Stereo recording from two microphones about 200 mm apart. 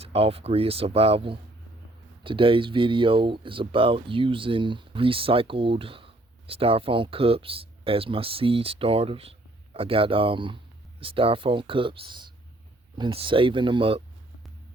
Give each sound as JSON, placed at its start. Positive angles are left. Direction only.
{"t": 0.0, "sound": "speech", "side_deg": -30}